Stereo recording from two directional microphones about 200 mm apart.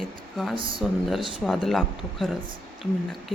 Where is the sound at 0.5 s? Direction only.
25° right (ahead or behind).